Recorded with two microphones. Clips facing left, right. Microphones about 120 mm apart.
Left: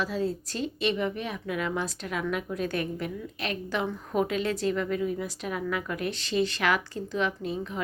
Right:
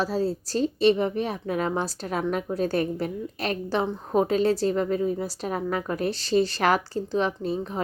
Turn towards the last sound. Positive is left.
turn(degrees=-35)  # may be behind; listen again after turning